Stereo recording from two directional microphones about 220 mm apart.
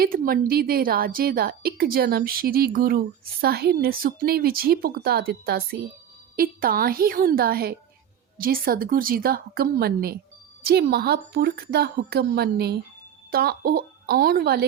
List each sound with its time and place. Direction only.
0.0 s a woman's voice: 40° right (ahead or behind)